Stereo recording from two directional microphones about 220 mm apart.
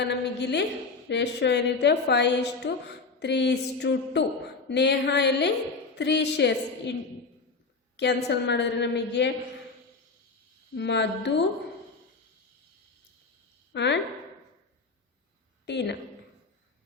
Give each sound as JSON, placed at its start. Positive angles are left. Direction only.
{"t": 0.0, "sound": "a woman's voice", "side_deg": 50}
{"t": 7.9, "sound": "a woman's voice", "side_deg": 50}
{"t": 10.8, "sound": "a woman's voice", "side_deg": 50}
{"t": 13.7, "sound": "a woman's voice", "side_deg": 50}
{"t": 15.6, "sound": "a woman's voice", "side_deg": 50}